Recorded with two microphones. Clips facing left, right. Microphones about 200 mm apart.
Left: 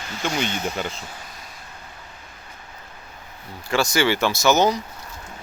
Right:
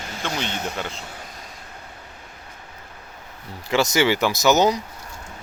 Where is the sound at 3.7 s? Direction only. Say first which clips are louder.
Right 1 dB; 20° right (ahead or behind).